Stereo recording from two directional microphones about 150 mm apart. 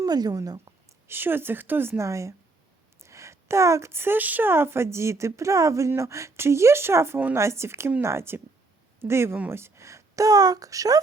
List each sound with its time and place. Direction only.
0.0 s speech: 25° right (ahead or behind)
1.0 s a woman's voice: 15° right (ahead or behind)